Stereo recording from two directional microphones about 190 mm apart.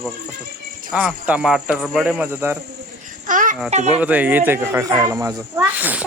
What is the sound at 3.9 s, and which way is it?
Speech, 10° right (ahead or behind).